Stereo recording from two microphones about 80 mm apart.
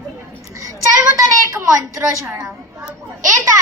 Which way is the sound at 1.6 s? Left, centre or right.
Right.